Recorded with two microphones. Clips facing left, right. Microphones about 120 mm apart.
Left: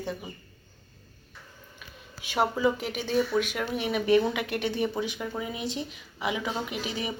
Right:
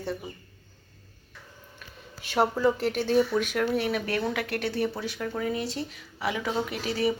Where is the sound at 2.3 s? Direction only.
10° left (ahead or behind).